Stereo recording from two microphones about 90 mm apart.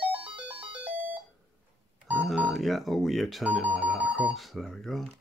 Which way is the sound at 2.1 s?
Centre (ahead or behind).